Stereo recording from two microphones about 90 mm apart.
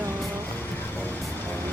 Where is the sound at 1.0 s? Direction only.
20° left (ahead or behind).